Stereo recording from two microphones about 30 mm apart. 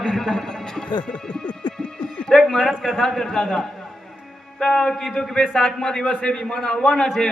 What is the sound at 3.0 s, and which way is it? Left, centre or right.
Speech, centre.